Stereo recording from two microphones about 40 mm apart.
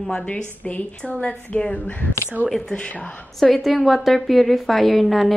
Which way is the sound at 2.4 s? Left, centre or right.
Left.